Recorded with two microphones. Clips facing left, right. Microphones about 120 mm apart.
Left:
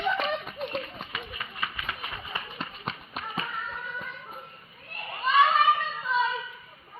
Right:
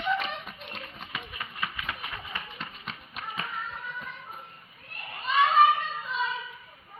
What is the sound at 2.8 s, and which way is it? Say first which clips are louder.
Tap: left 4 dB; 40° left (ahead or behind).